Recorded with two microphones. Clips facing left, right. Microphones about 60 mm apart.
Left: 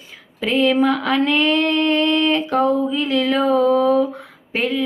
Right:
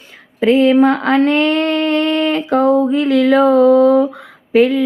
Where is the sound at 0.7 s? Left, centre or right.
Right.